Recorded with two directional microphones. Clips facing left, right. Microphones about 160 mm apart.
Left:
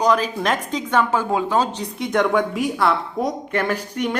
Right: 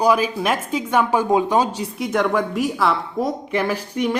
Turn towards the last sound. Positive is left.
turn(degrees=-10)  # may be behind; listen again after turning